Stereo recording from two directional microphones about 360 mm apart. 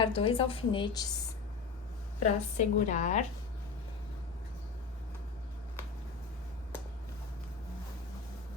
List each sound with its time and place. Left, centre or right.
0.0 s a woman's voice: centre
2.2 s a woman's voice: centre